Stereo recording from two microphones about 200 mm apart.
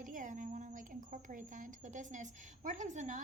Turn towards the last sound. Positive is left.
turn(degrees=-35)  # may be behind; listen again after turning